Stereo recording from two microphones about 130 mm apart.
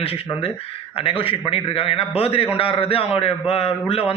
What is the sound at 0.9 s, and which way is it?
A man's voice, 45° left (ahead or behind).